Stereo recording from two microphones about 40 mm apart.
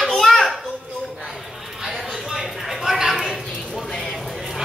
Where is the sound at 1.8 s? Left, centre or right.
Centre.